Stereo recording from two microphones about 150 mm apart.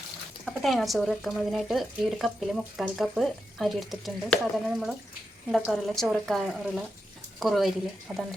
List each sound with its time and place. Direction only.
0.4 s speech: centre (ahead or behind)